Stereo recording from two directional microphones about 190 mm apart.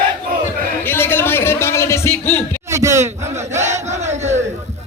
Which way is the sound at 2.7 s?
15° right (ahead or behind).